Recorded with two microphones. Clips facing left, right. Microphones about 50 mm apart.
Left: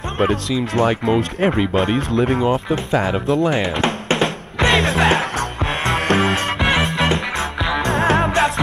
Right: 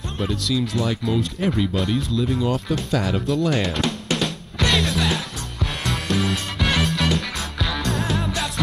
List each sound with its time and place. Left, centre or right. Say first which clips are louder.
0.7 s speech: left 6 dB; left
2.4 s speech: left 5 dB; left
3.8 s music: left 5 dB; left
6.6 s music: left 2 dB; left
7.9 s music: left 8 dB; left